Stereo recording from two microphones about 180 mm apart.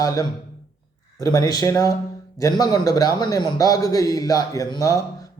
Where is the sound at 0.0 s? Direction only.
20° left (ahead or behind).